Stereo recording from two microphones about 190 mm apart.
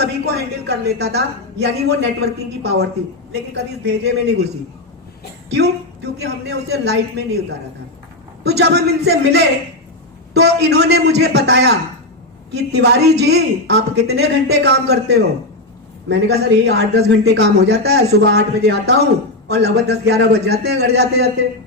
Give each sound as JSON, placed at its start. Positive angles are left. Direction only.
{"t": 0.0, "sound": "speech", "side_deg": -60}
{"t": 5.5, "sound": "speech", "side_deg": -60}
{"t": 8.4, "sound": "speech", "side_deg": -60}